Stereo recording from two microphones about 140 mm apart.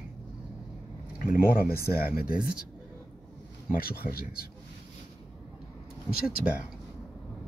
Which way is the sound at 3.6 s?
90° left.